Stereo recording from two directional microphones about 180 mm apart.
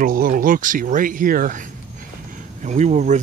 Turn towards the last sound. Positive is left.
turn(degrees=-40)  # may be behind; listen again after turning